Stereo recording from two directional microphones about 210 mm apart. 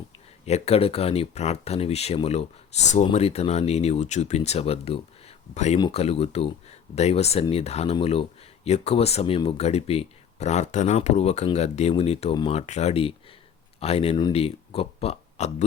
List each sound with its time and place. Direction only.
0.4 s speech: 30° left (ahead or behind)